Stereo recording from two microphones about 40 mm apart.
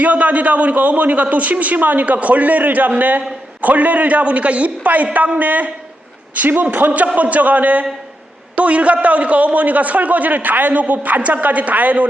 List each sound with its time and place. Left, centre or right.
0.0 s a man's voice: right